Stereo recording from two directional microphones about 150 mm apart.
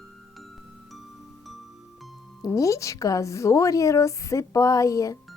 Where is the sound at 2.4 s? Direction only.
20° left (ahead or behind).